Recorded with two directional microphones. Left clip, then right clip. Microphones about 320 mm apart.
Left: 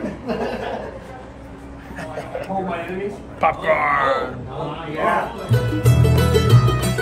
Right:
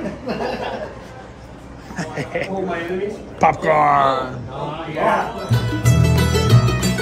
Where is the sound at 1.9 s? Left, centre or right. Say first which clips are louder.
Right 4 dB; right.